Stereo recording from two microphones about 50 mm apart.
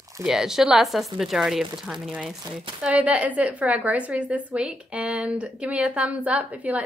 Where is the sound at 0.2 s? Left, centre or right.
Centre.